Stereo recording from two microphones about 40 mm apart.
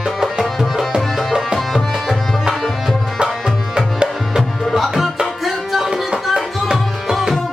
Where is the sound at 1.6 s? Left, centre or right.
Centre.